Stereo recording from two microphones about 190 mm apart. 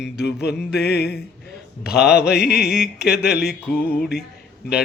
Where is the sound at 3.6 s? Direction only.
10° left (ahead or behind).